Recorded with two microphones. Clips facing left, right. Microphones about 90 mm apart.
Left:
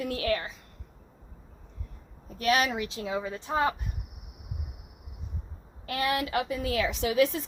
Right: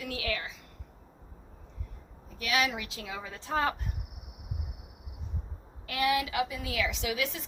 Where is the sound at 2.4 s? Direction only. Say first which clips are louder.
Left 4 dB; 40° left (ahead or behind); by 3.7 s 20° left (ahead or behind).